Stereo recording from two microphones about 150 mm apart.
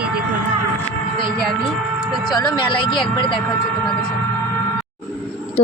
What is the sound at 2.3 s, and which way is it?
Speech, 30° left (ahead or behind).